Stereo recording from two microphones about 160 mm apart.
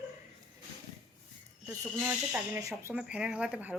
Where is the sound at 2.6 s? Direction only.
20° right (ahead or behind).